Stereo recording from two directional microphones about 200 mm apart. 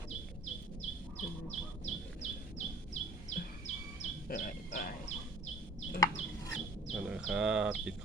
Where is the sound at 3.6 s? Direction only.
35° left (ahead or behind).